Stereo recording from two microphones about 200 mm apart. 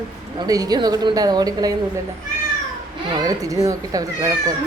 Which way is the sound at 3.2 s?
15° right (ahead or behind).